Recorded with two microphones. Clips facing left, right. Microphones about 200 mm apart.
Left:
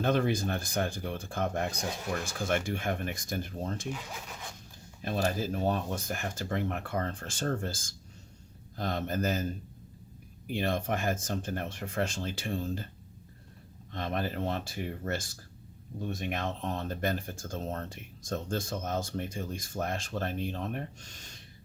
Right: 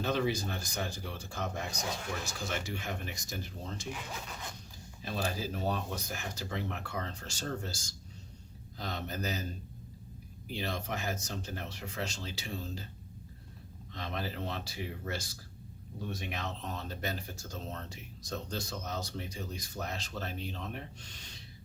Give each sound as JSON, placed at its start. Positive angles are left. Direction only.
{"t": 0.0, "sound": "speech", "side_deg": 55}
{"t": 5.0, "sound": "speech", "side_deg": 50}
{"t": 13.9, "sound": "speech", "side_deg": 50}